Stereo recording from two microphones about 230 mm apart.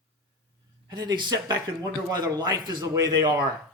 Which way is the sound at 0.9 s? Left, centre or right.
Centre.